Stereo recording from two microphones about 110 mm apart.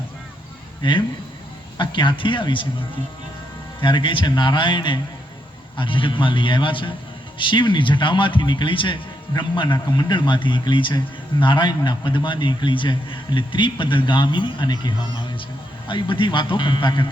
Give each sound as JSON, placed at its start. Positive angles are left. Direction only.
{"t": 0.8, "sound": "a man's voice", "side_deg": 50}
{"t": 3.8, "sound": "a man's voice", "side_deg": 50}